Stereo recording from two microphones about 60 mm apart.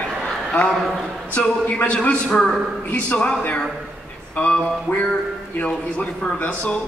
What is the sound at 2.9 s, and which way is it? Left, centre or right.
Speech, left.